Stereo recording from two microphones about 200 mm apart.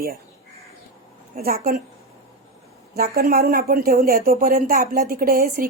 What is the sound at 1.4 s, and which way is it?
Speech, 50° right (ahead or behind).